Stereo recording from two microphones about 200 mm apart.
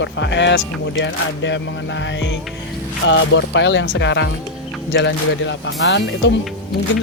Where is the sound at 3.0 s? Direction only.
65° left (ahead or behind).